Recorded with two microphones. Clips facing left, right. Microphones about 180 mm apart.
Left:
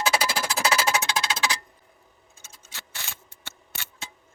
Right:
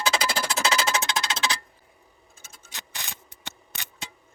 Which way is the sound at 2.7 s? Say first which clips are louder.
Right 1 dB; 15° right (ahead or behind).